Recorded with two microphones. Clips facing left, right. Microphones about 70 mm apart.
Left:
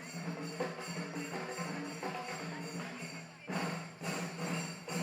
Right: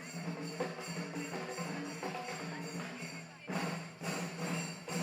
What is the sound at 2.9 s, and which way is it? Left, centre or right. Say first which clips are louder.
Music: even; left.